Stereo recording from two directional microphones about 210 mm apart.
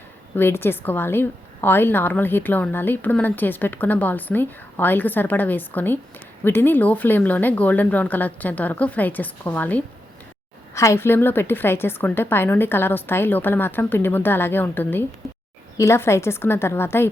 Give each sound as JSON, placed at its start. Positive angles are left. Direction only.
{"t": 0.3, "sound": "a woman's voice", "side_deg": 10}